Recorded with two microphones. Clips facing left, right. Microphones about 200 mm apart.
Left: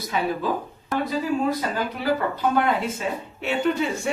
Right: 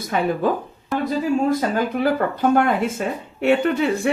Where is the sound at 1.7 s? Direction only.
50° right (ahead or behind).